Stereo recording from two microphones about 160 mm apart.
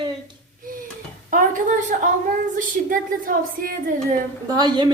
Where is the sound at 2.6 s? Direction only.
60° right (ahead or behind).